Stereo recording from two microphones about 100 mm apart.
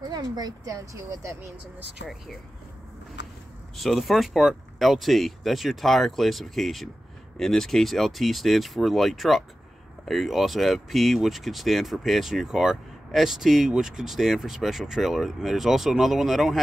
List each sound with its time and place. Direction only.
0.1 s speech: 40° right (ahead or behind)
3.7 s speech: centre (ahead or behind)